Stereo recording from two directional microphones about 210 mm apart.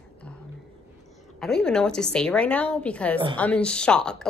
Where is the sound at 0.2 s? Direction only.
5° left (ahead or behind).